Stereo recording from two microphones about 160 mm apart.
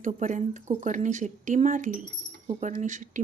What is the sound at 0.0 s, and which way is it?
Speech, 50° right (ahead or behind).